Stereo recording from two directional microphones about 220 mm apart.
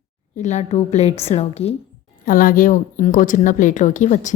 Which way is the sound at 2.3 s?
40° left (ahead or behind).